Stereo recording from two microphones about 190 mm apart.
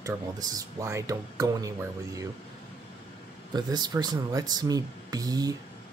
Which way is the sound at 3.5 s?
20° right (ahead or behind).